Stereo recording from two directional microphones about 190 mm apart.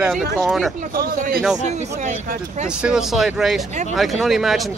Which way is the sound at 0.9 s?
50° right (ahead or behind).